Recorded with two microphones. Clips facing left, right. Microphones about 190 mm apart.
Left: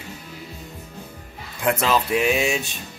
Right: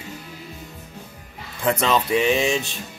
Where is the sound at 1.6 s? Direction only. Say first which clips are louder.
Even; 5° left (ahead or behind).